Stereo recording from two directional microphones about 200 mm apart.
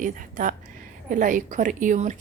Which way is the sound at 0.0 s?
40° right (ahead or behind).